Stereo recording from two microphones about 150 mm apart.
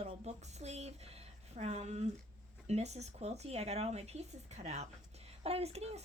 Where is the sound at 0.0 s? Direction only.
45° right (ahead or behind).